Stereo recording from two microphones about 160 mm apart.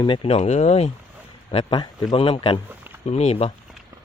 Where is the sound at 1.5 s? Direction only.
30° left (ahead or behind).